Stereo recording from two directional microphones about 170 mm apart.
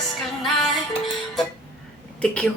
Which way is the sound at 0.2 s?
Centre (ahead or behind).